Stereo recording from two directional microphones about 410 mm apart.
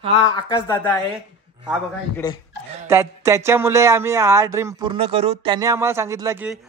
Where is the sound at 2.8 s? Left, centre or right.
Centre.